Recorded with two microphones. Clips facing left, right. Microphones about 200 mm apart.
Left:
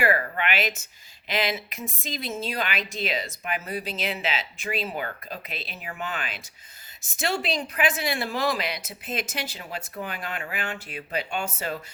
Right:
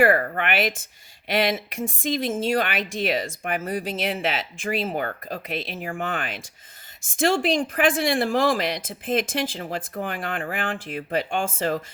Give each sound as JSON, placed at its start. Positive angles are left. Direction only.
{"t": 0.0, "sound": "speech", "side_deg": -50}